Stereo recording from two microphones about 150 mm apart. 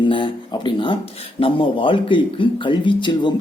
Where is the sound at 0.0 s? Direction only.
35° left (ahead or behind).